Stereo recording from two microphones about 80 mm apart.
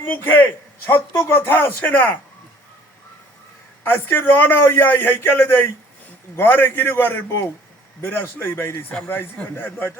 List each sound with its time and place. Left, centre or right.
0.0 s a man's voice: left
3.8 s a man's voice: left